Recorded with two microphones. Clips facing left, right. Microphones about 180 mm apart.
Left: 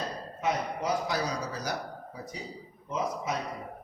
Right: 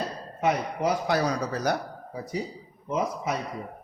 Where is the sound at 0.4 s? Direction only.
65° right (ahead or behind).